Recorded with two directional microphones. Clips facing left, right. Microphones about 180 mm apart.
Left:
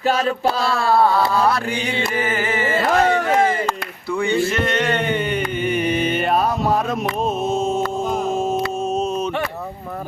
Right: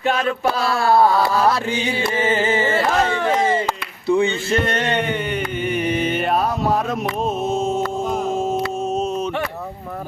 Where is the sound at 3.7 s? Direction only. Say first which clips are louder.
Right 4 dB; 20° right (ahead or behind).